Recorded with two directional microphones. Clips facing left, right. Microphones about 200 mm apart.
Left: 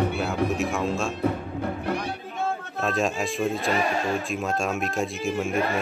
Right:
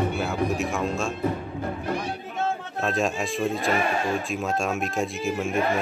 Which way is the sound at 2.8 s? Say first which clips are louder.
Even; centre (ahead or behind).